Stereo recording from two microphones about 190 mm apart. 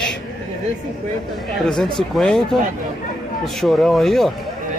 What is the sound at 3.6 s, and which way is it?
Speech, centre (ahead or behind).